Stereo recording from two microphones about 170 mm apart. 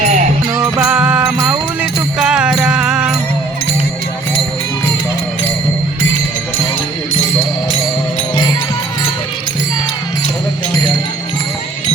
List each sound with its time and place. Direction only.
0.0 s music: 45° right (ahead or behind)
0.8 s music: 5° right (ahead or behind)